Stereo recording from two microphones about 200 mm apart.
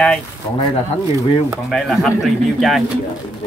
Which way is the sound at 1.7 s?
Centre (ahead or behind).